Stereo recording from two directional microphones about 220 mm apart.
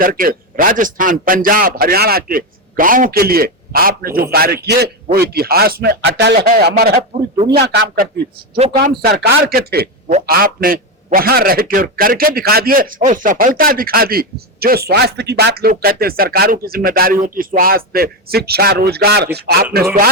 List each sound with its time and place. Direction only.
0.0 s a man's voice: 40° right (ahead or behind)
7.3 s speech: 25° right (ahead or behind)
7.6 s a man's voice: 50° right (ahead or behind)
8.5 s speech: 30° right (ahead or behind)
8.8 s a man's voice: 45° right (ahead or behind)